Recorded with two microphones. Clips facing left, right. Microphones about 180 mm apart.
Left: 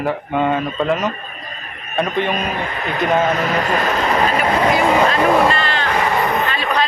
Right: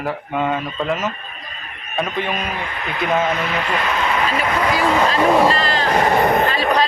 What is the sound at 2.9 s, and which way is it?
Speech, 40° left (ahead or behind).